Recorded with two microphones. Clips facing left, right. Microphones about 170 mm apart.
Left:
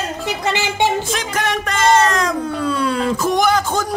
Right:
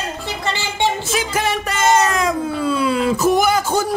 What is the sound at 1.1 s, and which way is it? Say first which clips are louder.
Speech: right 1 dB; 5° right (ahead or behind).